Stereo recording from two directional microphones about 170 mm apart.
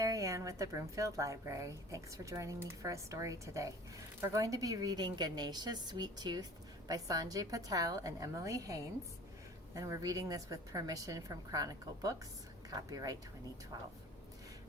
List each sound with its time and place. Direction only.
0.0 s a woman's voice: 20° right (ahead or behind)